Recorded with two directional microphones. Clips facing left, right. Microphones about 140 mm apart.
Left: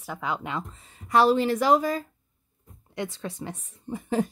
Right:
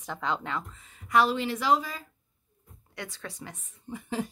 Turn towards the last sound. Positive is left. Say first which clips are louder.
# left 6 dB
turn(degrees=45)  # may be behind; listen again after turning